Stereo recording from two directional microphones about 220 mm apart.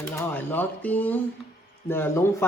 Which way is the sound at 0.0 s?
10° left (ahead or behind).